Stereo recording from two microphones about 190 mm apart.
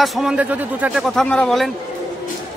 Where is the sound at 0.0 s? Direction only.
Centre (ahead or behind).